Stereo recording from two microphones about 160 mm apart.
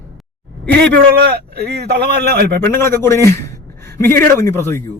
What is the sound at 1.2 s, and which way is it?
Speech, 90° right.